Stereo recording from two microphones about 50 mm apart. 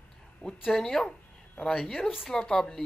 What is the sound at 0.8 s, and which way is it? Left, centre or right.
Speech, centre.